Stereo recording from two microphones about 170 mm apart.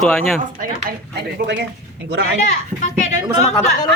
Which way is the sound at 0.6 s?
55° right (ahead or behind).